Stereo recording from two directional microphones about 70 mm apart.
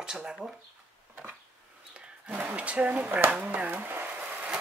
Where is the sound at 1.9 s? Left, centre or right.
Centre.